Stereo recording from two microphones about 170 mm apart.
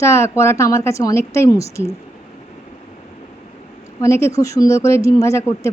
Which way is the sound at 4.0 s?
15° left (ahead or behind).